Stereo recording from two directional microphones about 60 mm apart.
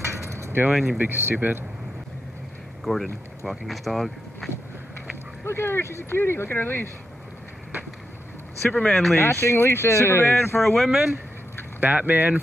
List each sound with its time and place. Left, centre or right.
0.0 s keys jangling: right
0.7 s speech: centre
0.9 s speech: right
2.8 s speech: centre
5.4 s speech: left
8.8 s speech: centre
9.1 s speech: left
10.6 s speech: centre
11.8 s speech: right